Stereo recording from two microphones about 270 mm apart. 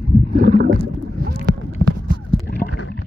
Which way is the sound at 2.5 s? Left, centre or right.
Left.